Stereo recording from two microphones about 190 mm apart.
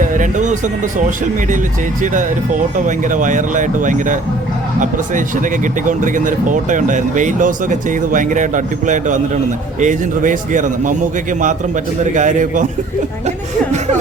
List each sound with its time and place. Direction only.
0.0 s speech: 45° right (ahead or behind)
2.0 s speech: 45° right (ahead or behind)